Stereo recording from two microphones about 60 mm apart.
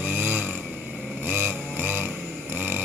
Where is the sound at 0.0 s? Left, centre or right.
Right.